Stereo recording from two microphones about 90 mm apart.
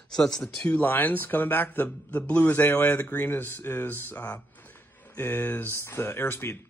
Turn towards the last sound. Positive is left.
turn(degrees=25)  # may be behind; listen again after turning